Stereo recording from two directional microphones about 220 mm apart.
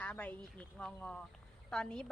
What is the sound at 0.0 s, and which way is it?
A woman's voice, 5° left (ahead or behind).